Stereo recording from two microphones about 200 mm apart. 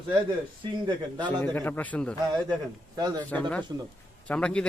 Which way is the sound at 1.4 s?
10° left (ahead or behind).